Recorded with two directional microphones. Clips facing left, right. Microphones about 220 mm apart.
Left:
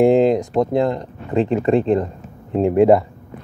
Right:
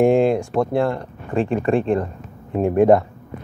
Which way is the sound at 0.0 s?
20° left (ahead or behind).